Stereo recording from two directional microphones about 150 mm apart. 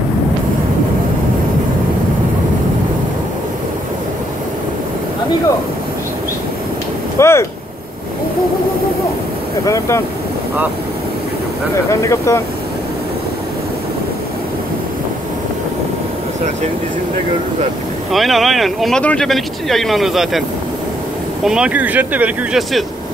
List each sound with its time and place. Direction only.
7.2 s speech: 20° left (ahead or behind)
9.7 s speech: 20° left (ahead or behind)
11.9 s speech: 20° left (ahead or behind)
18.1 s speech: centre (ahead or behind)
21.5 s speech: 5° right (ahead or behind)